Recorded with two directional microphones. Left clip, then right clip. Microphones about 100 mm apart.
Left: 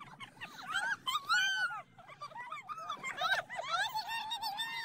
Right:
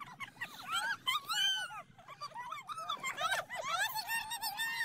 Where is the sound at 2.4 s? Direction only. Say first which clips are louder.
Right 1 dB; 90° right.